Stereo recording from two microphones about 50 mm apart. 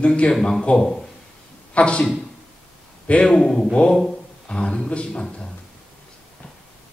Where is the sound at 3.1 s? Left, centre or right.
Centre.